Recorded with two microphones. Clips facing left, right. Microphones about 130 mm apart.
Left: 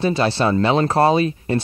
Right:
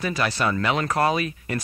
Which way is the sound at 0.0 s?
30° left (ahead or behind).